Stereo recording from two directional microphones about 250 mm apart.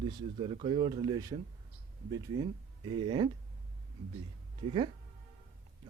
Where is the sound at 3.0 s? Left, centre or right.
Centre.